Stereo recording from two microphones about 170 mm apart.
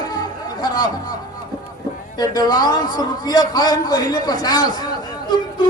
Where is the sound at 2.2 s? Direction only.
25° left (ahead or behind).